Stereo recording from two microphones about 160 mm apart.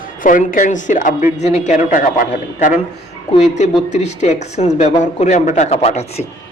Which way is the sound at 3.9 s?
45° left (ahead or behind).